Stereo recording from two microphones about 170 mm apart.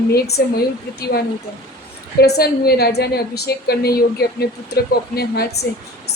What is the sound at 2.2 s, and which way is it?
Speech, 70° left (ahead or behind).